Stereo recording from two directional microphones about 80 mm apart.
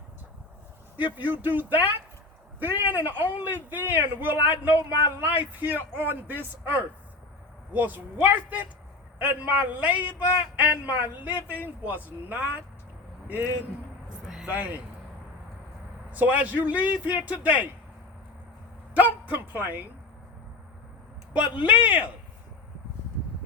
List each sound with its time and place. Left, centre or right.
0.9 s a man's voice: right
16.1 s a man's voice: right
18.9 s speech: right
21.3 s a man's voice: centre